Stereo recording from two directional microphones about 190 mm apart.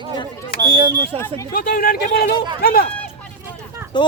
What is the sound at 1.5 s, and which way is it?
Speech, 50° left (ahead or behind).